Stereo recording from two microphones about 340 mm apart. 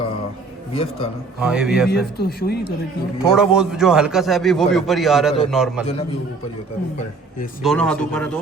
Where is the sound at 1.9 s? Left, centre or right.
Left.